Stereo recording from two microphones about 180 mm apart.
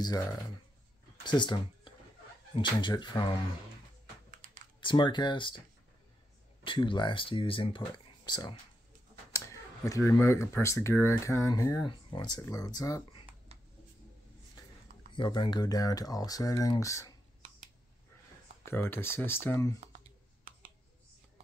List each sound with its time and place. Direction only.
0.0 s speech: 20° left (ahead or behind)
4.7 s speech: 25° left (ahead or behind)
6.6 s speech: 25° left (ahead or behind)
13.5 s a sound: 35° right (ahead or behind)
15.1 s speech: 25° left (ahead or behind)
18.7 s speech: 15° left (ahead or behind)